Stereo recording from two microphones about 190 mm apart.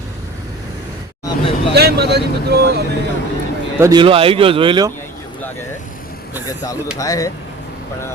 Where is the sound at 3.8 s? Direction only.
15° right (ahead or behind).